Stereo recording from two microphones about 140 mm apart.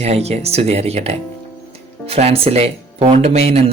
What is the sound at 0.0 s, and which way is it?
Speech, 50° right (ahead or behind).